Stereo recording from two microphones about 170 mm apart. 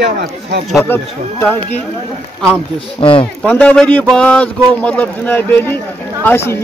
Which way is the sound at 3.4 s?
10° left (ahead or behind).